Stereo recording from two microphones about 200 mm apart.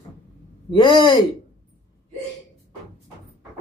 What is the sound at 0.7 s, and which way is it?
Speech, 25° left (ahead or behind).